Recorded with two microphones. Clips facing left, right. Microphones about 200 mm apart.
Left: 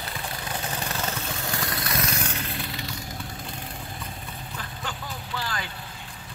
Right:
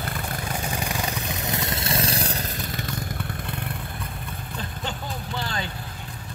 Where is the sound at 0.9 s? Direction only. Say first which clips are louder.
Right 2 dB; 15° right (ahead or behind); by 2.9 s 45° right (ahead or behind).